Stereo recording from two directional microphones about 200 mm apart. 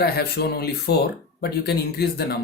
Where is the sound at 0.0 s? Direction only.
50° left (ahead or behind).